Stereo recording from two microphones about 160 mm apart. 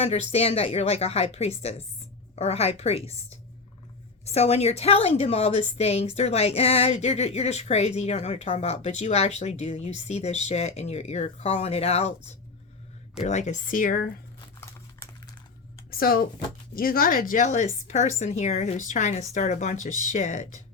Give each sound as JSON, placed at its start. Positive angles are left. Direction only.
{"t": 0.0, "sound": "a woman's voice", "side_deg": 40}
{"t": 14.6, "sound": "crumpling", "side_deg": 15}
{"t": 15.9, "sound": "a woman's voice", "side_deg": 65}